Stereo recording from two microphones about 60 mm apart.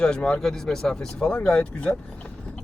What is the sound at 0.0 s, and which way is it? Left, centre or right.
Speech, centre.